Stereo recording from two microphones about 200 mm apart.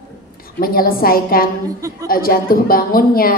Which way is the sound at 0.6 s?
45° left (ahead or behind).